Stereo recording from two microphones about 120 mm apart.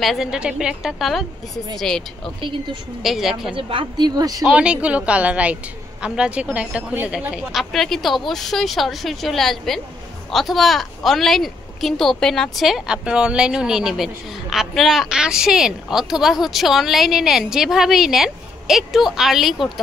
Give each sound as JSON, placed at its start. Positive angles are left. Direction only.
{"t": 0.0, "sound": "a woman's voice", "side_deg": 0}
{"t": 3.5, "sound": "a woman's voice", "side_deg": -45}
{"t": 4.1, "sound": "speech", "side_deg": -30}
{"t": 4.4, "sound": "a woman's voice", "side_deg": -5}
{"t": 7.7, "sound": "a woman's voice", "side_deg": 0}